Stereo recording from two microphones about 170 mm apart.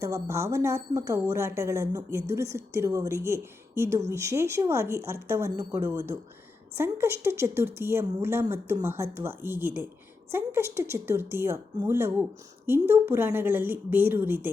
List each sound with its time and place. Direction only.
0.0 s a woman's voice: 15° right (ahead or behind)